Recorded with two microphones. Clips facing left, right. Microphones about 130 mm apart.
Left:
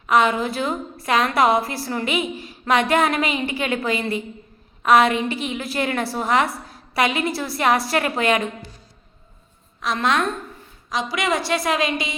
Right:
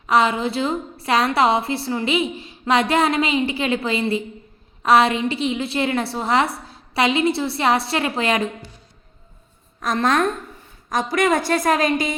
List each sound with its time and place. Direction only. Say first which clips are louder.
0.1 s a woman's voice: even; 30° right (ahead or behind)
9.8 s a woman's voice: right 2 dB; 45° right (ahead or behind)